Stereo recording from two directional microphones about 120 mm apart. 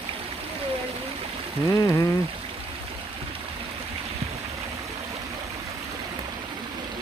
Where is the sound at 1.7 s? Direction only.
25° left (ahead or behind).